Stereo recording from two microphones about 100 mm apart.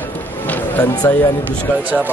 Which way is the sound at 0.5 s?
15° left (ahead or behind).